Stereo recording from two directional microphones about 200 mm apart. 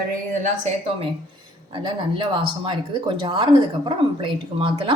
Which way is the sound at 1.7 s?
25° right (ahead or behind).